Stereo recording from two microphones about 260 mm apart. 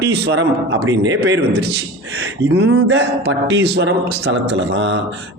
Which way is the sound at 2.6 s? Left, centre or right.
Right.